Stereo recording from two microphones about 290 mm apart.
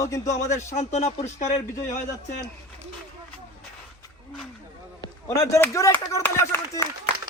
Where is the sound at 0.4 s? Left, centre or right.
Left.